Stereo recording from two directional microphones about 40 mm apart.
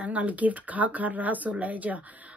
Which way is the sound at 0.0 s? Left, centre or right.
Right.